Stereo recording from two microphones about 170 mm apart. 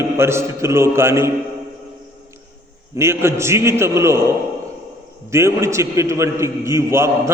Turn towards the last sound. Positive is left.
turn(degrees=-15)  # may be behind; listen again after turning